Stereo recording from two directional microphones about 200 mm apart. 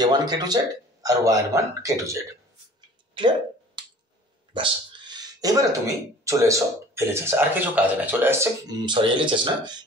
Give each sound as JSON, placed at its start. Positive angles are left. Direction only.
{"t": 0.0, "sound": "speech", "side_deg": -20}
{"t": 4.6, "sound": "speech", "side_deg": -20}
{"t": 8.8, "sound": "speech", "side_deg": -25}